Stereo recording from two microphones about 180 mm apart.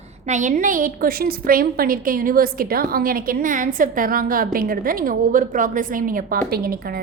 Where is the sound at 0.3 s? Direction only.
45° right (ahead or behind).